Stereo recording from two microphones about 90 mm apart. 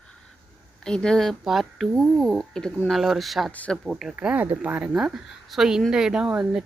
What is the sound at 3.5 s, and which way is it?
Speech, 15° left (ahead or behind).